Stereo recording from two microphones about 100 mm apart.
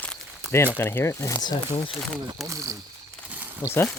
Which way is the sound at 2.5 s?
35° right (ahead or behind).